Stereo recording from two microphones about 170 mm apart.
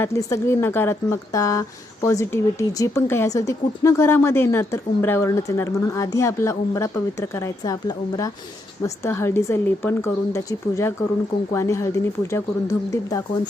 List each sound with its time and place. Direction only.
0.0 s a woman's voice: 15° left (ahead or behind)